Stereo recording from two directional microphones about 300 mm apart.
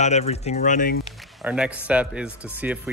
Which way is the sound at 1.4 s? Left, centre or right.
Centre.